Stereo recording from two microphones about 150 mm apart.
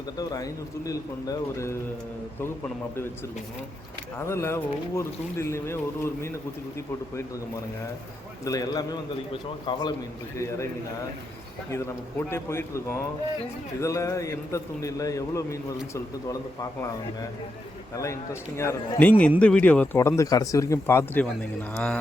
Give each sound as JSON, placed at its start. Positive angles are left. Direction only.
{"t": 0.2, "sound": "a man's voice", "side_deg": 25}
{"t": 4.3, "sound": "speech", "side_deg": 15}
{"t": 8.4, "sound": "a man's voice", "side_deg": 25}
{"t": 11.7, "sound": "a man's voice", "side_deg": 20}
{"t": 17.9, "sound": "a man's voice", "side_deg": 20}
{"t": 20.0, "sound": "a man's voice", "side_deg": 20}